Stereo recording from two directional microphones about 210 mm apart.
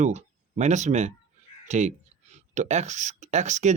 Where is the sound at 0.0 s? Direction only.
35° right (ahead or behind).